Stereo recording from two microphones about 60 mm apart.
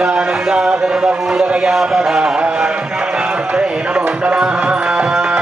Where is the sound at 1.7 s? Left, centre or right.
Centre.